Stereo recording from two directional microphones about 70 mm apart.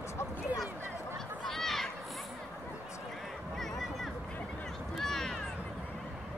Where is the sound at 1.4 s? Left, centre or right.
Centre.